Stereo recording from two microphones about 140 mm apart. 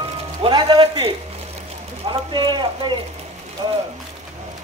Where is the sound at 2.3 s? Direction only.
35° right (ahead or behind).